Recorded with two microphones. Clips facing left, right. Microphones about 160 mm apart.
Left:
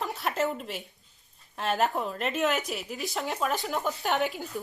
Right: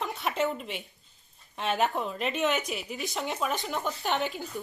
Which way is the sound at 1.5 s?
Centre (ahead or behind).